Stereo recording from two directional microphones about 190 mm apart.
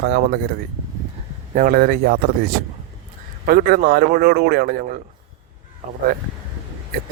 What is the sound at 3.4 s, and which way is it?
A man's voice, 50° right (ahead or behind).